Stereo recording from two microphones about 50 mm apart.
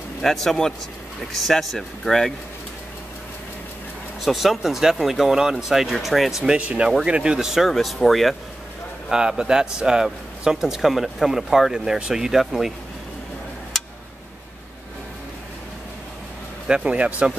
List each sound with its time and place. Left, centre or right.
0.2 s speech: centre
4.2 s speech: centre
6.4 s speech: right
7.3 s speech: centre
7.7 s speech: centre
9.1 s speech: centre
16.6 s speech: right